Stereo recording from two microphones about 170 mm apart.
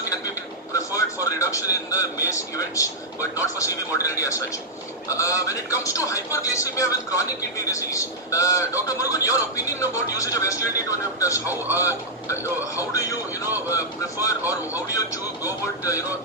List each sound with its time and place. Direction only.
0.7 s a man's voice: 20° left (ahead or behind)